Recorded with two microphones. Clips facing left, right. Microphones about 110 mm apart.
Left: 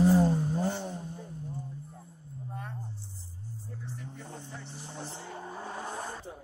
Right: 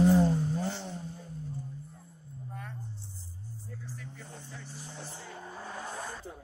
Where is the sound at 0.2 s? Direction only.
10° left (ahead or behind).